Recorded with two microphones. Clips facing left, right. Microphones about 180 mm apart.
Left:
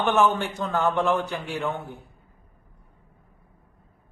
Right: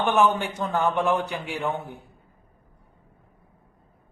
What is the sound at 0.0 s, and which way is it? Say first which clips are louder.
Speech: even; 15° right (ahead or behind).